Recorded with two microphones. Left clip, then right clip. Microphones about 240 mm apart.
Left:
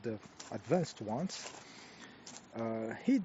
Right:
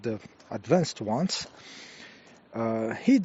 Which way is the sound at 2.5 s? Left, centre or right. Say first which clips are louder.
Right 10 dB; right.